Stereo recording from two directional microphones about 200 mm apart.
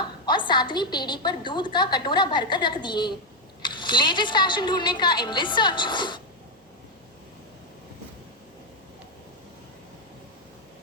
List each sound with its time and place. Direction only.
0.3 s a woman's voice: 20° left (ahead or behind)